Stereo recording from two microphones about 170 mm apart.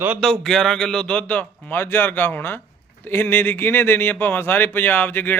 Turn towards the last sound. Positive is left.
turn(degrees=10)  # may be behind; listen again after turning